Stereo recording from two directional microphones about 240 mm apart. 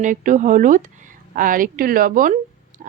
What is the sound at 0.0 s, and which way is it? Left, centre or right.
A woman's voice, right.